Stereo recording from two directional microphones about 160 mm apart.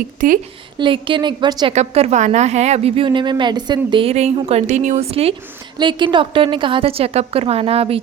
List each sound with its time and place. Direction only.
0.8 s a woman's voice: 30° right (ahead or behind)
1.7 s a woman's voice: 40° right (ahead or behind)
5.8 s a woman's voice: 30° right (ahead or behind)